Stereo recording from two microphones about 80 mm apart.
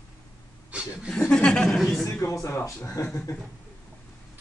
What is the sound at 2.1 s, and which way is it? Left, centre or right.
Speech, left.